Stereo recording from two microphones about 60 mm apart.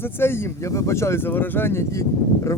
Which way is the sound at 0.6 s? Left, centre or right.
Left.